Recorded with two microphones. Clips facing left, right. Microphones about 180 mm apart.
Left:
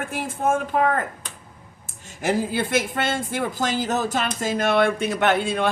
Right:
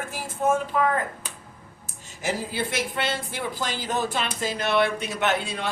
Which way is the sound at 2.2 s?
55° left (ahead or behind).